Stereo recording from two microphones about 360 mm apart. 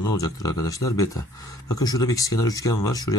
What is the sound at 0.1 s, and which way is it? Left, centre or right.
Speech, centre.